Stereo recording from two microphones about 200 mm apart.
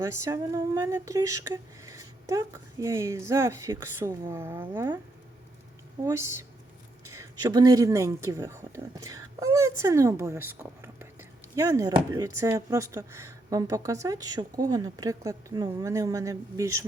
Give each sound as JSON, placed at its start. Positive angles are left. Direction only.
{"t": 0.0, "sound": "speech", "side_deg": -15}
{"t": 6.1, "sound": "speech", "side_deg": -15}